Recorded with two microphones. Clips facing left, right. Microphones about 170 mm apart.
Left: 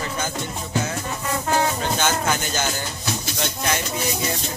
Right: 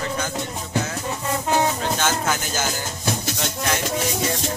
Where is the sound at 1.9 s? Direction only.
Centre (ahead or behind).